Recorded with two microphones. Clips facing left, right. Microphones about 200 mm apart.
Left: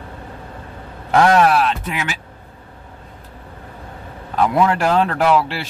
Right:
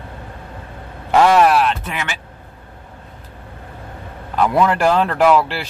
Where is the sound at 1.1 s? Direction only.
5° right (ahead or behind).